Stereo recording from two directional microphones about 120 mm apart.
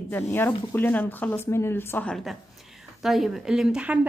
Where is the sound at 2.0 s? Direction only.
Centre (ahead or behind).